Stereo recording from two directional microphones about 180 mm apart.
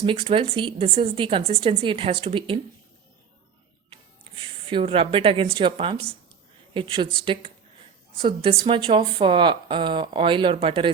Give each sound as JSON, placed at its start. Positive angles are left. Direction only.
{"t": 0.0, "sound": "a woman's voice", "side_deg": -30}
{"t": 4.2, "sound": "a woman's voice", "side_deg": -30}